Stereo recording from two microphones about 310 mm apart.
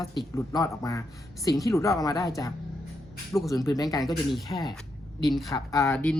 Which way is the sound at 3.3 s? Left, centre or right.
Centre.